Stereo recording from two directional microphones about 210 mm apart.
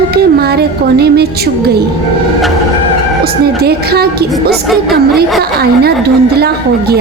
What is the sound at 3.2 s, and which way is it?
A woman's voice, 50° right (ahead or behind).